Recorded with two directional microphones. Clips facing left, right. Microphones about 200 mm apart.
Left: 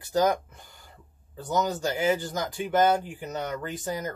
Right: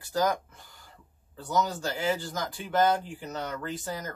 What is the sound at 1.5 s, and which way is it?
Speech, 15° left (ahead or behind).